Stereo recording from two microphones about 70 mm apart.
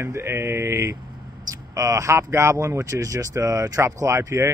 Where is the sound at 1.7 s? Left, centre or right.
Right.